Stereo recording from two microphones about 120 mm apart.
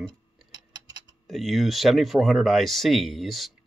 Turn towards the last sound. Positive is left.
turn(degrees=0)  # may be behind; listen again after turning